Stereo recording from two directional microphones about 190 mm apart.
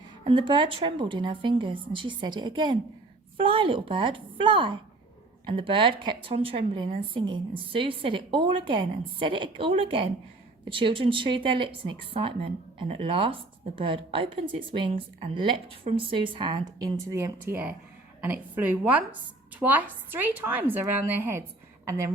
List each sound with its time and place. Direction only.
0.3 s a woman's voice: 25° right (ahead or behind)